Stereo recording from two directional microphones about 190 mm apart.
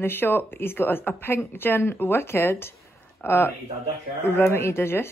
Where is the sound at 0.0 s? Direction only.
10° left (ahead or behind).